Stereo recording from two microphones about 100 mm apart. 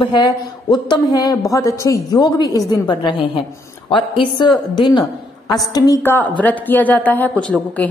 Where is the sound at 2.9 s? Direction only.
55° left (ahead or behind).